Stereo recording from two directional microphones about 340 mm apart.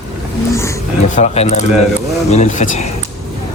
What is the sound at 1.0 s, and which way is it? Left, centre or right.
Speech, left.